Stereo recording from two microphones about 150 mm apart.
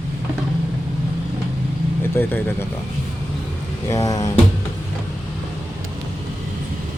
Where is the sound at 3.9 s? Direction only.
20° left (ahead or behind).